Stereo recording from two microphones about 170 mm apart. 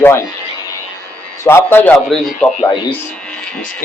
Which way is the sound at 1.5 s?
15° left (ahead or behind).